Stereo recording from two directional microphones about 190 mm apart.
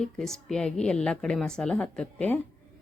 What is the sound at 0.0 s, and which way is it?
A woman's voice, centre (ahead or behind).